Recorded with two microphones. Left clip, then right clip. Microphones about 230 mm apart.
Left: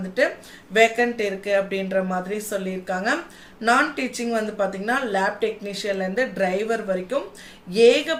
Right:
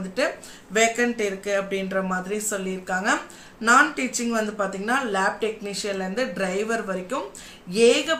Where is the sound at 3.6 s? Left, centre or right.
Centre.